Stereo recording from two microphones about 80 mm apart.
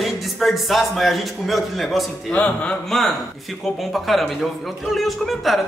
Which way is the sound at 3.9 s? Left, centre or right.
Centre.